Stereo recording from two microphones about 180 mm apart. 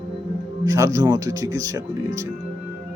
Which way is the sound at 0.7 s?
15° right (ahead or behind).